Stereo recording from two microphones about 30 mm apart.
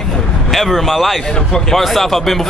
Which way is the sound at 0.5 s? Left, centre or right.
Centre.